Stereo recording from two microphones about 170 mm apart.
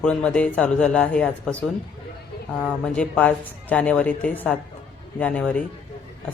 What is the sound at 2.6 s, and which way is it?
Speech, 5° left (ahead or behind).